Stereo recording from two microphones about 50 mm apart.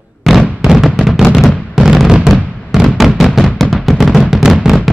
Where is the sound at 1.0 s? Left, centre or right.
Centre.